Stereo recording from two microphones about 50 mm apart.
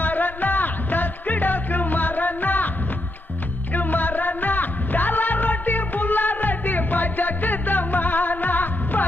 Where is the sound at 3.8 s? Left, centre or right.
Left.